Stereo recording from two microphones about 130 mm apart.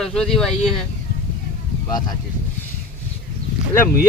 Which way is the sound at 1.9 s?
30° left (ahead or behind).